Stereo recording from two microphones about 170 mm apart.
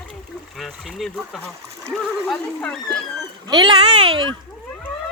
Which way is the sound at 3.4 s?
25° right (ahead or behind).